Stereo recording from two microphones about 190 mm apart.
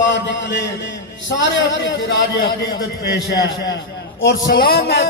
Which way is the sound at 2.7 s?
60° left (ahead or behind).